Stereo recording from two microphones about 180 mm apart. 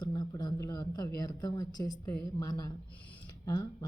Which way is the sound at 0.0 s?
25° left (ahead or behind).